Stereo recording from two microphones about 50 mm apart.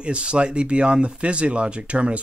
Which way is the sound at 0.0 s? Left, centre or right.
Right.